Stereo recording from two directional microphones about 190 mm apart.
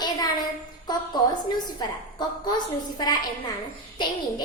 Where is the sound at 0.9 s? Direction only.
20° left (ahead or behind).